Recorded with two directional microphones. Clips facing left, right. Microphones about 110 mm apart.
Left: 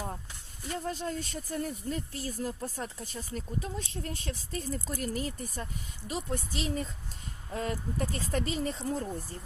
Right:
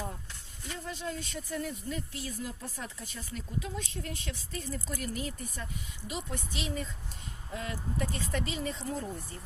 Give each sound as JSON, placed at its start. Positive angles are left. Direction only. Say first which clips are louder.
{"t": 0.7, "sound": "speech", "louder": "left 4 dB", "side_deg": 45}